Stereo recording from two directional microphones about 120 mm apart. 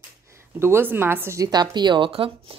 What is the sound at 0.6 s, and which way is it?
Speech, 20° right (ahead or behind).